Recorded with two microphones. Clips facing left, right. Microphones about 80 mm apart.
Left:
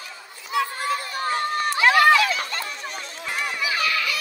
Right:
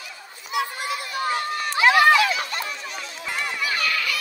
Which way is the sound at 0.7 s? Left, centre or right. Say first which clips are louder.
Left 2 dB; left.